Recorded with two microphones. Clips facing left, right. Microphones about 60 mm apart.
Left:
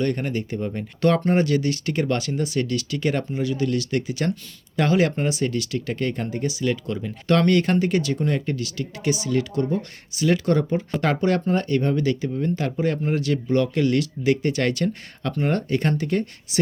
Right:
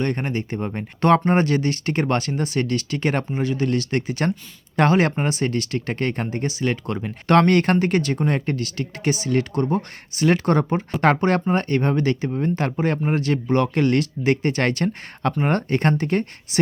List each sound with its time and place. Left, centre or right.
0.0 s speech: right